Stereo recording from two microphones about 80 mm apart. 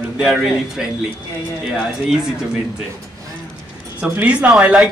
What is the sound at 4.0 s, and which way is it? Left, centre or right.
Speech, centre.